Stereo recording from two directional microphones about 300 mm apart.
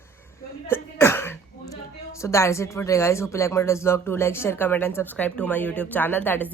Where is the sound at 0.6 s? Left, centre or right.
Centre.